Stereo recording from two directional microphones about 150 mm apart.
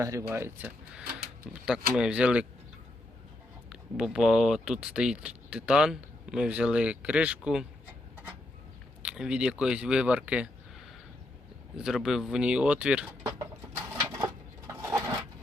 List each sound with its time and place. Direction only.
0.0 s speech: 20° right (ahead or behind)
3.7 s speech: 5° right (ahead or behind)
9.0 s speech: 5° right (ahead or behind)
11.8 s speech: centre (ahead or behind)
14.7 s a sound: 20° right (ahead or behind)